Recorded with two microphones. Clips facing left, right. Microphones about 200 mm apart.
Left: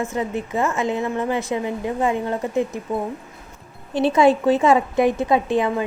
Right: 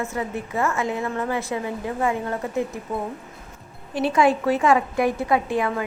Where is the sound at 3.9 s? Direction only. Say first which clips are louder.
Left 4 dB; 25° left (ahead or behind).